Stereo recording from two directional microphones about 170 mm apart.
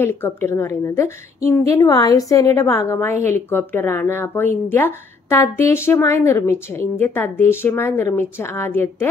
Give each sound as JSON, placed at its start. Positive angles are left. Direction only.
{"t": 0.0, "sound": "a woman's voice", "side_deg": 15}